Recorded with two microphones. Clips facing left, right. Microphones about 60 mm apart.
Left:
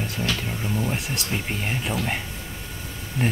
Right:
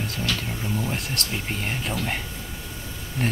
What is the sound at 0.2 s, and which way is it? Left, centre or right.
Speech, centre.